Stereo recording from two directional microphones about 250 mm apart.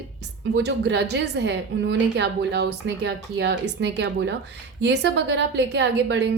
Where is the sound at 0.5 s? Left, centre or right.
Right.